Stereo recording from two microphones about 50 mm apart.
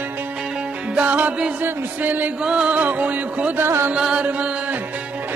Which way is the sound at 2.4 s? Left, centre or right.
Centre.